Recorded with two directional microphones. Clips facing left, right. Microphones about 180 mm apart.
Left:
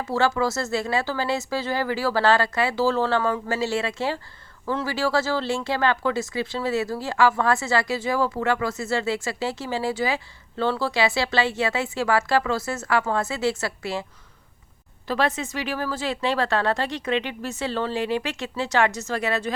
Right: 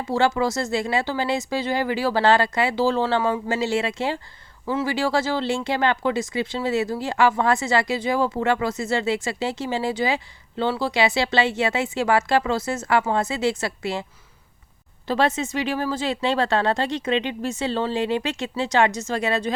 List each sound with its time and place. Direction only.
0.1 s speech: 20° right (ahead or behind)
15.0 s speech: 25° right (ahead or behind)